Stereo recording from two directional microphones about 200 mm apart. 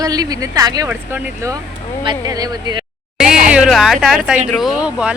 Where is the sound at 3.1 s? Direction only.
5° right (ahead or behind).